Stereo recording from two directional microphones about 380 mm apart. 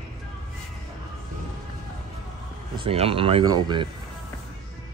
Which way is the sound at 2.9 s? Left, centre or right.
Centre.